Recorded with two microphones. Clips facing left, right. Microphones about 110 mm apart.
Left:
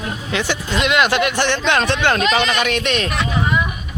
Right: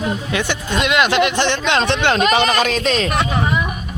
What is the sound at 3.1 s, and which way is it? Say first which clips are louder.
Speech: right 3 dB; 55° right (ahead or behind).